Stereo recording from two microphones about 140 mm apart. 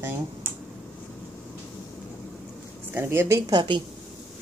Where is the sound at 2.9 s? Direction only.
20° right (ahead or behind).